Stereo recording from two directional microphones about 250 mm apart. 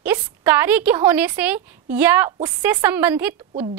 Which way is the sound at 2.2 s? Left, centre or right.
Centre.